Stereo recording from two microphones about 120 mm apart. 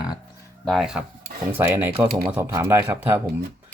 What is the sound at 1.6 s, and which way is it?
Speech, 15° right (ahead or behind).